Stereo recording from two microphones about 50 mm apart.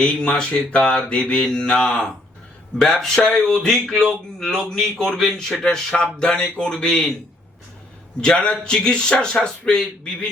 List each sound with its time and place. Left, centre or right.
0.0 s mantra: centre
2.7 s speech: centre
8.2 s speech: centre
9.3 s mantra: left